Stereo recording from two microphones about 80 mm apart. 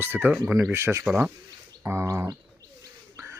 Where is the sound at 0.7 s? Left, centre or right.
Right.